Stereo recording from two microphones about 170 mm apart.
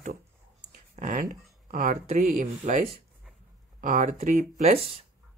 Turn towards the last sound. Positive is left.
turn(degrees=-35)  # may be behind; listen again after turning